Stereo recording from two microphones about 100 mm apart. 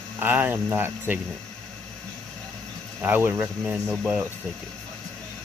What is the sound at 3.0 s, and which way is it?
Speech, 20° right (ahead or behind).